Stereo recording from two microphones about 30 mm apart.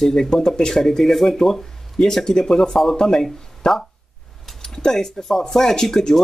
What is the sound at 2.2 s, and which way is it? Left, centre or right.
Speech, left.